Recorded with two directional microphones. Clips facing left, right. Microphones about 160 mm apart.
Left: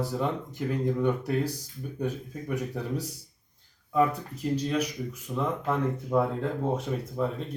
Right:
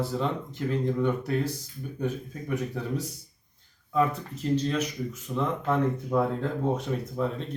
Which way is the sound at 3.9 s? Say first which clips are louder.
Left 1 dB; 10° left (ahead or behind).